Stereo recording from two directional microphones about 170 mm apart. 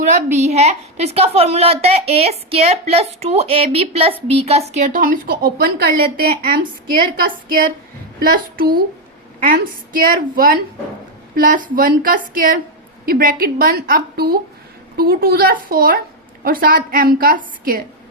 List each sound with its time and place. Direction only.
0.1 s a woman's voice: 40° right (ahead or behind)
4.9 s a woman's voice: 55° right (ahead or behind)